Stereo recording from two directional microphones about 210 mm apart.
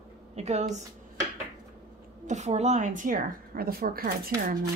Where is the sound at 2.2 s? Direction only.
35° right (ahead or behind).